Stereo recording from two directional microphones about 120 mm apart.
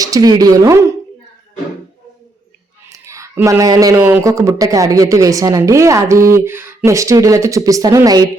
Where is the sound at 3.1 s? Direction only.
25° right (ahead or behind).